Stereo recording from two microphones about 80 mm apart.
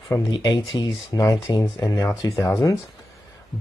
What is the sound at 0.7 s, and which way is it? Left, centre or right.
Speech, left.